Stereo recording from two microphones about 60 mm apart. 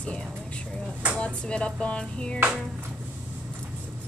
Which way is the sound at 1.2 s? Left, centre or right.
Centre.